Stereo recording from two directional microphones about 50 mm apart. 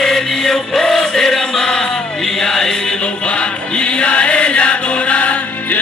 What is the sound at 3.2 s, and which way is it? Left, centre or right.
Chant, left.